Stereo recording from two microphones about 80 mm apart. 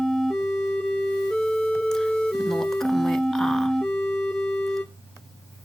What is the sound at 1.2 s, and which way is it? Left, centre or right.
Organ, centre.